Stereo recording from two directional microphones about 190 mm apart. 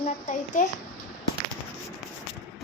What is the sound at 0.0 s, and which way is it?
Speech, 40° left (ahead or behind).